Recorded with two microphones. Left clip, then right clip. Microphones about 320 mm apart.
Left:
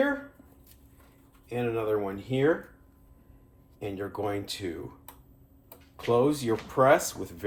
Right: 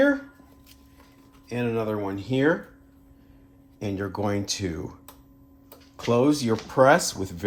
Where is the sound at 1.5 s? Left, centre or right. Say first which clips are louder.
Right 1 dB; right.